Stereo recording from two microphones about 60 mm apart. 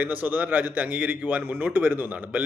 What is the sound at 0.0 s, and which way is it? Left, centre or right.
A man's voice, right.